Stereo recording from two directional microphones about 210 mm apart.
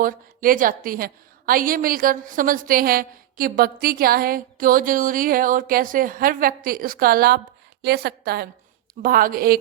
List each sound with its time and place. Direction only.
0.0 s a woman's voice: 40° right (ahead or behind)